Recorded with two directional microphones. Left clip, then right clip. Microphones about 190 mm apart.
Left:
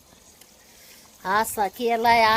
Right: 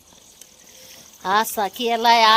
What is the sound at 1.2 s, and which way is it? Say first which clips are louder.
Speech: right 3 dB; 20° right (ahead or behind).